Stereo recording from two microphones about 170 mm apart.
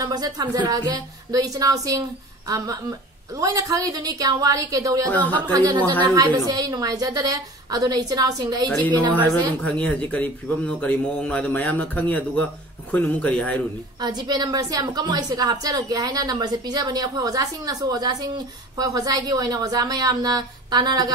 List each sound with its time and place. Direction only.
0.0 s speech: 25° right (ahead or behind)
5.1 s a man's voice: 10° left (ahead or behind)
5.5 s speech: 25° right (ahead or behind)
8.6 s a man's voice: 10° left (ahead or behind)
13.9 s speech: 25° right (ahead or behind)